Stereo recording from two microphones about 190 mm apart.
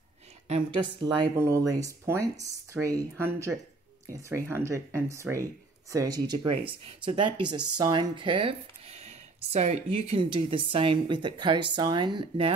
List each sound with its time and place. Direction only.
0.5 s speech: 25° right (ahead or behind)